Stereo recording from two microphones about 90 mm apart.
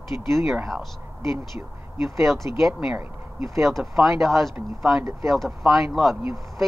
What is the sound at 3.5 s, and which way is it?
Speech, centre (ahead or behind).